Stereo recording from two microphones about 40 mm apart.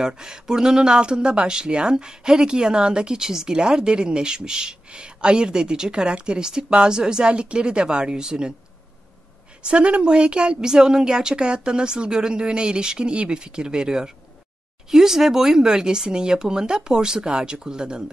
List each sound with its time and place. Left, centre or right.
0.0 s a woman's voice: centre
9.7 s a woman's voice: right